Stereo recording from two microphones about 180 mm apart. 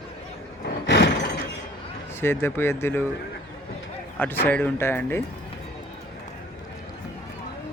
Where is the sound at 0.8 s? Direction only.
70° left (ahead or behind).